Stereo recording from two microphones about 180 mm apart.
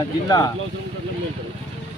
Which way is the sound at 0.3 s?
20° left (ahead or behind).